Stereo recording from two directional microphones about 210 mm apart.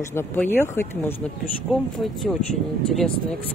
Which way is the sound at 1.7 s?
Centre (ahead or behind).